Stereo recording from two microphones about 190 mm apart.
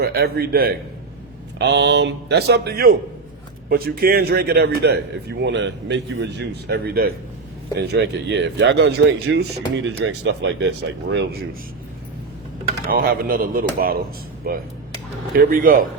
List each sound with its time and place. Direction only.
0.0 s a man's voice: 55° right (ahead or behind)
1.5 s a man's voice: 70° right (ahead or behind); by 7.1 s 55° right (ahead or behind)
7.8 s a man's voice: 65° right (ahead or behind)
9.8 s speech: 75° right (ahead or behind)
12.9 s speech: 50° right (ahead or behind)